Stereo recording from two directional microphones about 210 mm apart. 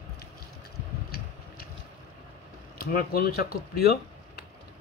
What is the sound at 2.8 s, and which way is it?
Speech, 45° left (ahead or behind).